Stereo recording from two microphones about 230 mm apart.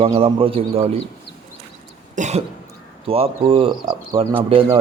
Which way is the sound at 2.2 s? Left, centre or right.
Right.